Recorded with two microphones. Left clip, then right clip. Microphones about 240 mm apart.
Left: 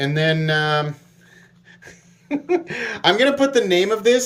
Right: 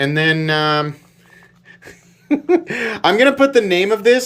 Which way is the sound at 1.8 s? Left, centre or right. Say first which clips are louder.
Right 2 dB; right.